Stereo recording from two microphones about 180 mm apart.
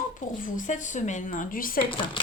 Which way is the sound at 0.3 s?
45° left (ahead or behind).